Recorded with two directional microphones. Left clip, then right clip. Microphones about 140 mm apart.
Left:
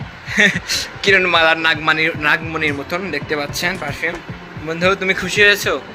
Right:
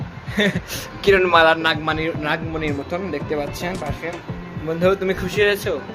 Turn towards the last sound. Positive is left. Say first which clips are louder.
# left 6 dB
turn(degrees=-25)  # may be behind; listen again after turning